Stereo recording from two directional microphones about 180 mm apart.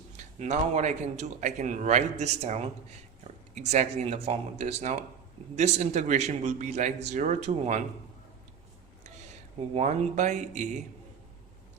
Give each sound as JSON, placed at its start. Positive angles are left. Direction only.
{"t": 0.3, "sound": "speech", "side_deg": -40}
{"t": 3.7, "sound": "speech", "side_deg": -40}
{"t": 9.7, "sound": "speech", "side_deg": -40}